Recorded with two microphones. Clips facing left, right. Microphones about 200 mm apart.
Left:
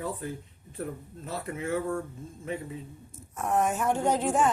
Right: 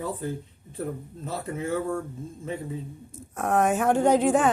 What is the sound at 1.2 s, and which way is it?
Speech, 35° right (ahead or behind).